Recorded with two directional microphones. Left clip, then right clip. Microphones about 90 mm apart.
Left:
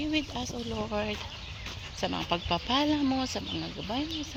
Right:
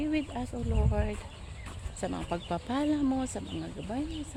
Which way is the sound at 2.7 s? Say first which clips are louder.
Left 2 dB; 35° right (ahead or behind).